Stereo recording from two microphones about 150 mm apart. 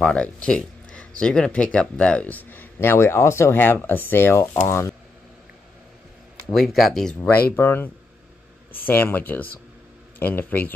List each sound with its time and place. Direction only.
0.0 s speech: 5° left (ahead or behind)
6.4 s speech: centre (ahead or behind)
7.5 s speech: 15° left (ahead or behind)